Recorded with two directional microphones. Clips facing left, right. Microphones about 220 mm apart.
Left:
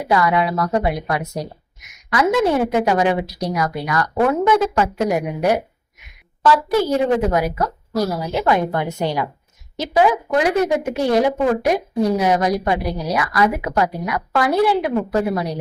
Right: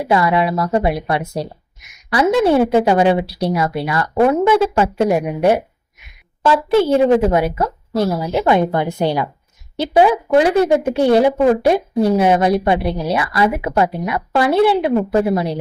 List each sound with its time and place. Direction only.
0.1 s a woman's voice: 25° right (ahead or behind)